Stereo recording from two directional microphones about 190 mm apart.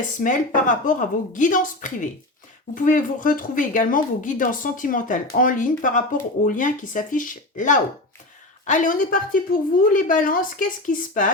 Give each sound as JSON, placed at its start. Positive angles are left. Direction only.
{"t": 0.2, "sound": "speech", "side_deg": 45}